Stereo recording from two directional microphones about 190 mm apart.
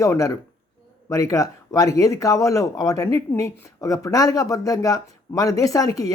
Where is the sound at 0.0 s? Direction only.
15° left (ahead or behind).